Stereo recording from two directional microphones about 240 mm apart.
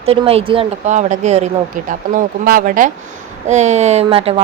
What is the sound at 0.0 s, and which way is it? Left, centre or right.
A woman's voice, right.